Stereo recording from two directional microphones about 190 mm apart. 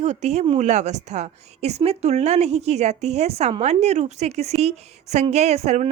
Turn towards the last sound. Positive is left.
turn(degrees=-35)  # may be behind; listen again after turning